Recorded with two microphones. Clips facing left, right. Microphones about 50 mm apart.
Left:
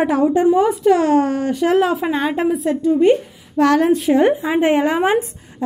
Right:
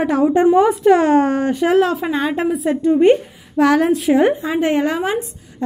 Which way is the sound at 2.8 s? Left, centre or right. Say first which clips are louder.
Right 2 dB; right.